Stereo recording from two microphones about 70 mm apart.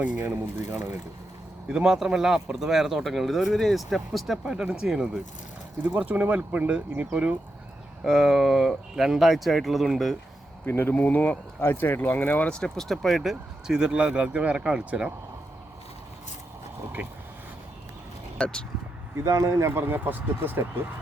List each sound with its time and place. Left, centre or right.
0.2 s speech: right
1.6 s speech: centre
8.0 s speech: centre
10.7 s speech: left; by 13.7 s centre
13.7 s speech: centre
18.3 s speech: centre
19.2 s speech: right
19.8 s speech: right